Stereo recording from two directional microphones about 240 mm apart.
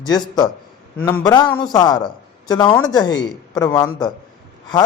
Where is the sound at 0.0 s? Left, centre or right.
Centre.